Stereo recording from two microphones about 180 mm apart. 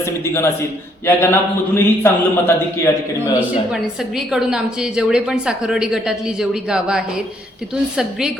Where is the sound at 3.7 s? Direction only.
5° right (ahead or behind).